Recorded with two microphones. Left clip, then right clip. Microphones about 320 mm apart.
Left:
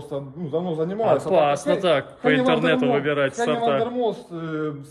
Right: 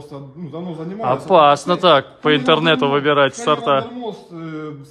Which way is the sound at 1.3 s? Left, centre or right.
Centre.